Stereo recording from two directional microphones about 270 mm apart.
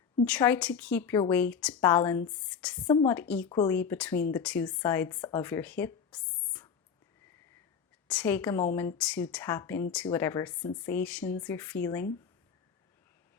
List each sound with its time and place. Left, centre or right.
0.3 s a woman's voice: centre
2.8 s a woman's voice: centre
3.2 s a woman's voice: centre
8.0 s a woman's voice: centre